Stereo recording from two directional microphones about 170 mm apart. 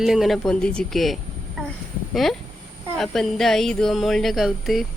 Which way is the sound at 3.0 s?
Centre (ahead or behind).